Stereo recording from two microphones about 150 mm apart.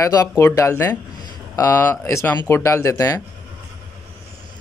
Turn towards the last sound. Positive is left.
turn(degrees=20)  # may be behind; listen again after turning